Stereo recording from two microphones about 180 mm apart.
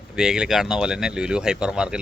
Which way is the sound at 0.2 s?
5° right (ahead or behind).